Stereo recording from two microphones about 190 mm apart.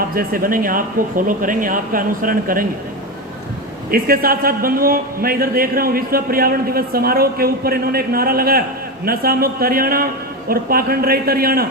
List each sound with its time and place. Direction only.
0.1 s a man's voice: 50° right (ahead or behind)
3.9 s a man's voice: 50° right (ahead or behind)